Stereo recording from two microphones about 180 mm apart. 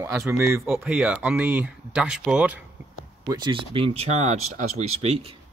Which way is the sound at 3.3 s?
30° right (ahead or behind).